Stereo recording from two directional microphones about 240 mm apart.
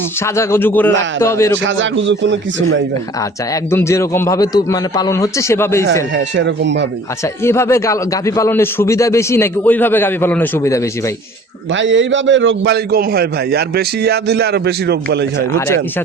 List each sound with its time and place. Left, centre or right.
0.2 s a man's voice: centre
1.6 s a man's voice: right
3.2 s a man's voice: centre
6.1 s a man's voice: right
7.4 s a man's voice: centre
11.7 s a man's voice: right
15.5 s a man's voice: centre